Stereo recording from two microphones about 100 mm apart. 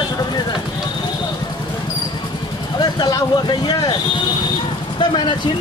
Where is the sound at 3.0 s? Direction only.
45° left (ahead or behind).